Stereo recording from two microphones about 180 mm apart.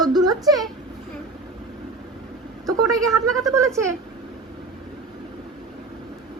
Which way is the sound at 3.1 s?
15° right (ahead or behind).